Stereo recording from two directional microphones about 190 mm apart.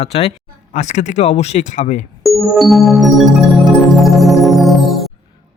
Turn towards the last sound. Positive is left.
turn(degrees=0)  # may be behind; listen again after turning